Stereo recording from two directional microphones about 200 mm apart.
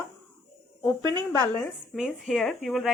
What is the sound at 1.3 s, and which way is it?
Speech, 15° left (ahead or behind).